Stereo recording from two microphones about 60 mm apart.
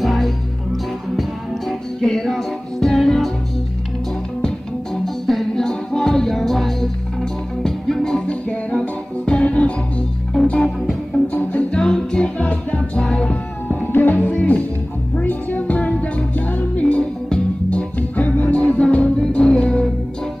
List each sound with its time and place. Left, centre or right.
0.0 s music: centre
1.7 s music: centre
5.0 s music: centre
8.5 s music: centre
12.4 s music: left
13.9 s music: left; by 19.9 s centre